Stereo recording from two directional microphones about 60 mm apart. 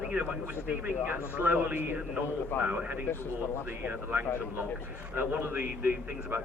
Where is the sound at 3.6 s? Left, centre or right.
Right.